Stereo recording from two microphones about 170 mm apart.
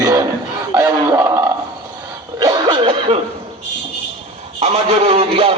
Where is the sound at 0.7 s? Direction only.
15° right (ahead or behind).